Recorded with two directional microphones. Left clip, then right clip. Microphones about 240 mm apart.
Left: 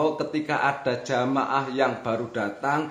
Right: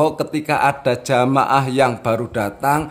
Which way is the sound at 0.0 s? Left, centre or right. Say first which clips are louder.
Right 7 dB; right.